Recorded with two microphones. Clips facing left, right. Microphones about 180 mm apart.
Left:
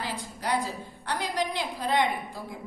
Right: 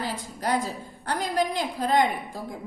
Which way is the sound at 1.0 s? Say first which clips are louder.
Right 4 dB; 45° right (ahead or behind).